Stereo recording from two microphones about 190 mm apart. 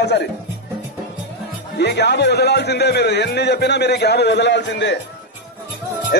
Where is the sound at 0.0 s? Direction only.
60° left (ahead or behind).